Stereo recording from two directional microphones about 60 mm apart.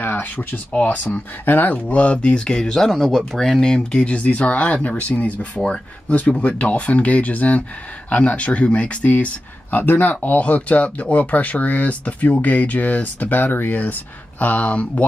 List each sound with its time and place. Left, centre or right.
0.0 s speech: left